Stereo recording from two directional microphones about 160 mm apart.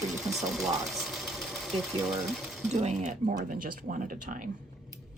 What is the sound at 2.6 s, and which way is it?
Speech, 45° right (ahead or behind).